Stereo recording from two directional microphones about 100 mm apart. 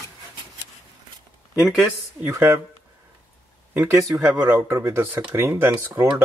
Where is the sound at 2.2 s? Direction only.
25° right (ahead or behind).